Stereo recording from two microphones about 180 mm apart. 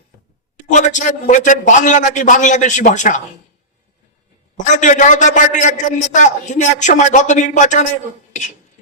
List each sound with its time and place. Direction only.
0.7 s a man's voice: 45° left (ahead or behind)
4.5 s a man's voice: 45° left (ahead or behind)
8.3 s beatboxing: 40° left (ahead or behind)